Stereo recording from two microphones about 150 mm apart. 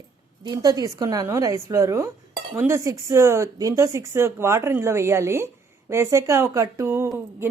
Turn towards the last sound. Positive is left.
turn(degrees=-15)  # may be behind; listen again after turning